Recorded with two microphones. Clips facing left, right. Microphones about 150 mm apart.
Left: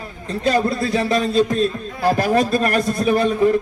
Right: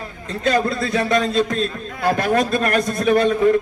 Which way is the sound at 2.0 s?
35° left (ahead or behind).